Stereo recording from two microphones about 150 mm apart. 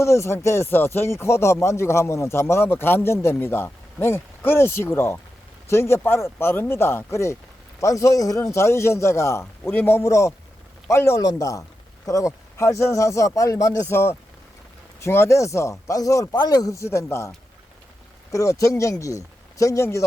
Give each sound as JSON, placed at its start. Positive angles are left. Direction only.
{"t": 0.0, "sound": "speech", "side_deg": 20}